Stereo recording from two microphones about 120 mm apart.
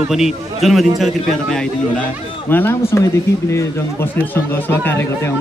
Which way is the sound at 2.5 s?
20° left (ahead or behind).